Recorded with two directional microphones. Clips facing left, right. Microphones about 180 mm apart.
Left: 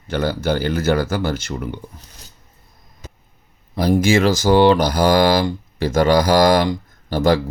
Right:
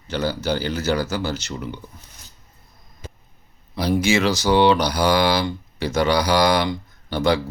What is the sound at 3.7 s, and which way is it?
Speech, 50° left (ahead or behind).